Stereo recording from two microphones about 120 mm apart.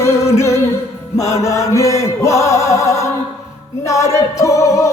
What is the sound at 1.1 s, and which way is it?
Chant, 25° left (ahead or behind).